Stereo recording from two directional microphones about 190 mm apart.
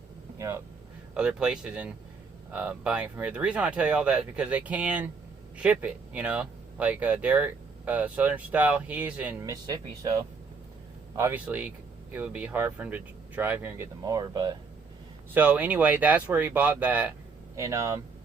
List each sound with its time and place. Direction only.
0.3 s speech: 15° right (ahead or behind)
1.1 s speech: 5° right (ahead or behind); by 14.6 s 20° right (ahead or behind)
15.3 s speech: 10° right (ahead or behind)